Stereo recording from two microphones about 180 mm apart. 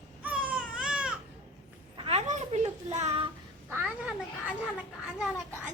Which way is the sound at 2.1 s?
40° right (ahead or behind).